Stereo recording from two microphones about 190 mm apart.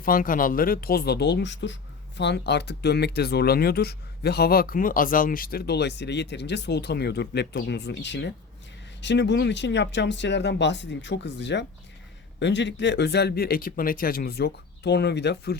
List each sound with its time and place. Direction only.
0.0 s speech: 45° left (ahead or behind)